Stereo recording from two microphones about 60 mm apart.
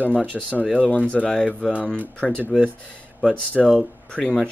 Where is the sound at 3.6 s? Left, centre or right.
Centre.